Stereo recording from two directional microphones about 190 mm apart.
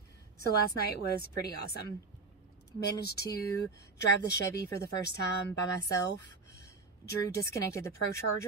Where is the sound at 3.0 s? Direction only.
55° left (ahead or behind).